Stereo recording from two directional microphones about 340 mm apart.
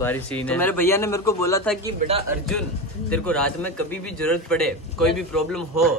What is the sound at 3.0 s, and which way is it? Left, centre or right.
A man's voice, centre.